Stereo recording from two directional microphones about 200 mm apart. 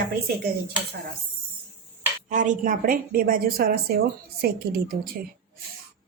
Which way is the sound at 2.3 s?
40° right (ahead or behind).